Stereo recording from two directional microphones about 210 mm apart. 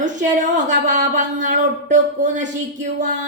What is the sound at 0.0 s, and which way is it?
Speech, 35° right (ahead or behind).